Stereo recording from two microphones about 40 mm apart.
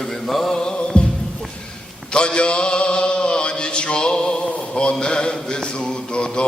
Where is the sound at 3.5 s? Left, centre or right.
Left.